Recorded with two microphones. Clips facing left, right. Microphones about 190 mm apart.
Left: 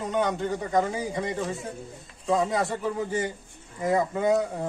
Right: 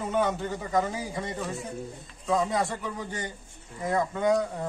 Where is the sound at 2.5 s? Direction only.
Centre (ahead or behind).